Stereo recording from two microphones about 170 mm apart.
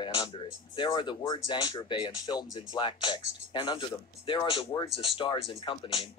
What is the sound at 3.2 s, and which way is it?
Speech, 40° right (ahead or behind).